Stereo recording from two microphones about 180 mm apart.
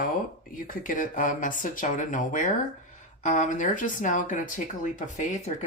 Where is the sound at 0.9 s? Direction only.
50° left (ahead or behind).